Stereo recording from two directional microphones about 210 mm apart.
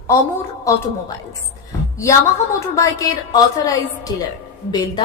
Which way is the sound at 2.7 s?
15° left (ahead or behind).